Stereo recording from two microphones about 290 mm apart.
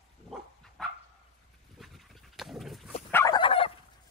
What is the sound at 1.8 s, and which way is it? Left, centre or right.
Dog, centre.